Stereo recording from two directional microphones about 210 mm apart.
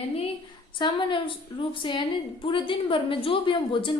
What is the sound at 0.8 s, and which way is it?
A woman's voice, 20° left (ahead or behind).